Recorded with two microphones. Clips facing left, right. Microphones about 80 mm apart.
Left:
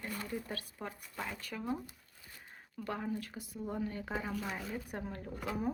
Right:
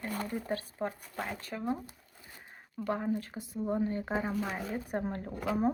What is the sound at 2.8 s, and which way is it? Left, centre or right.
Speech, right.